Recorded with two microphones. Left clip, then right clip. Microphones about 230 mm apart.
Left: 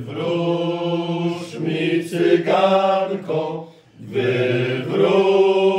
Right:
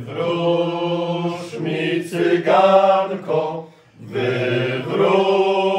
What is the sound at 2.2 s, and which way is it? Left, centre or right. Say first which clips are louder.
Mantra: right 2 dB; centre.